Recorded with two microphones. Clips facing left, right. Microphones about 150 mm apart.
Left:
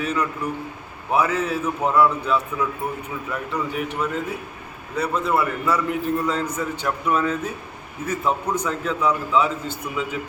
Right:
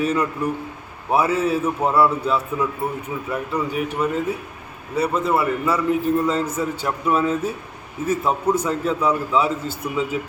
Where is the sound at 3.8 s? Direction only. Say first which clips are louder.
Right 5 dB; 10° right (ahead or behind).